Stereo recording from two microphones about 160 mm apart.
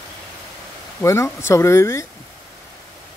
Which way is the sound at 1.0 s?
15° left (ahead or behind).